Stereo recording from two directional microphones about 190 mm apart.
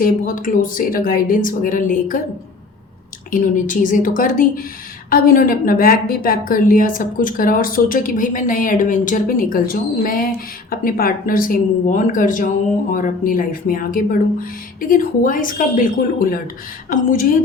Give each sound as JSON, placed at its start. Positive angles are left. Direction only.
{"t": 0.0, "sound": "a woman's voice", "side_deg": 45}
{"t": 3.3, "sound": "a woman's voice", "side_deg": 45}